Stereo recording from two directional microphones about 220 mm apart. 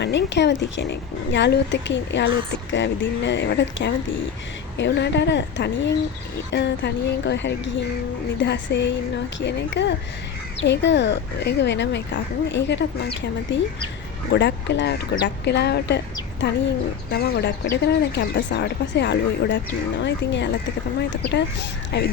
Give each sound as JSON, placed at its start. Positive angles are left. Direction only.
{"t": 0.0, "sound": "a woman's voice", "side_deg": 50}
{"t": 17.1, "sound": "a woman's voice", "side_deg": 45}
{"t": 21.9, "sound": "a woman's voice", "side_deg": 50}